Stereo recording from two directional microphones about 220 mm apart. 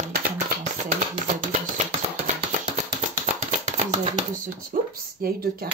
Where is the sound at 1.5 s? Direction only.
35° right (ahead or behind).